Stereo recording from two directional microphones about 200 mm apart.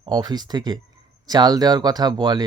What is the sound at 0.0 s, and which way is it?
Speech, 20° right (ahead or behind).